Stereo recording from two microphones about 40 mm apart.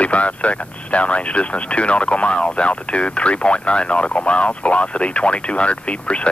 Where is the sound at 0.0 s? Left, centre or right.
Left.